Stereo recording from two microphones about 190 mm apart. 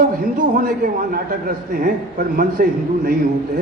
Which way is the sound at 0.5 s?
50° right (ahead or behind).